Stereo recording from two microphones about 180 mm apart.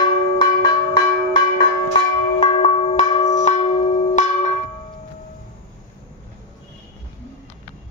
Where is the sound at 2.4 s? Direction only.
35° left (ahead or behind).